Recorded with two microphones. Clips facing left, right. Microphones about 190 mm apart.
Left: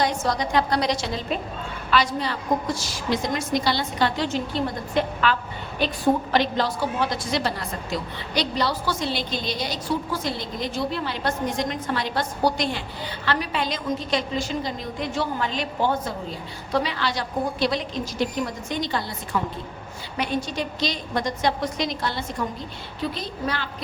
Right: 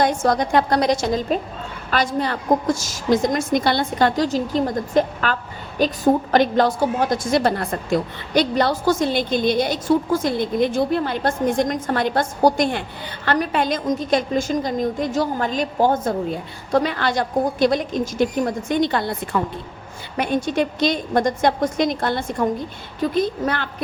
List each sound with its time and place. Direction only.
0.0 s a woman's voice: 50° right (ahead or behind)